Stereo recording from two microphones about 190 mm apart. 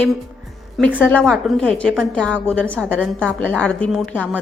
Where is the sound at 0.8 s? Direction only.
10° left (ahead or behind).